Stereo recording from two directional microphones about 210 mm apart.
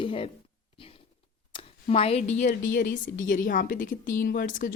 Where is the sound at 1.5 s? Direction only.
25° left (ahead or behind).